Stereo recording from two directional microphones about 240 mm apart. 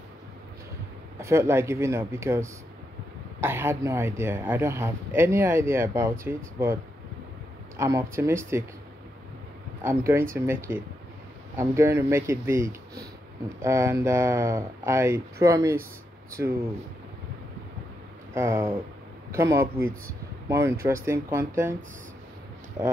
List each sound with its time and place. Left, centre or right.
1.2 s speech: centre
9.8 s speech: centre
18.3 s speech: centre